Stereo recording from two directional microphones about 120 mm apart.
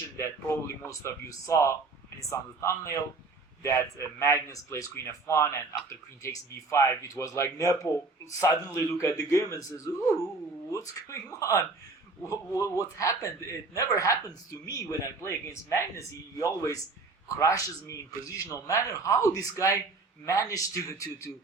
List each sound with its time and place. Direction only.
0.2 s a man's voice: 25° left (ahead or behind)